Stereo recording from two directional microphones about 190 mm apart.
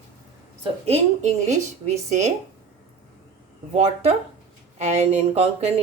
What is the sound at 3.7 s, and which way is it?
Speech, 35° right (ahead or behind).